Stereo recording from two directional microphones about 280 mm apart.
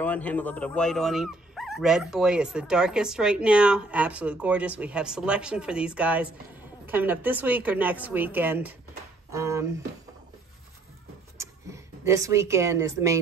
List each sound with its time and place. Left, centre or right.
0.0 s speech: centre
11.3 s speech: centre